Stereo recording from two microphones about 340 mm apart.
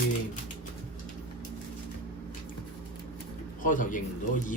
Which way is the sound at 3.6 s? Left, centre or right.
Left.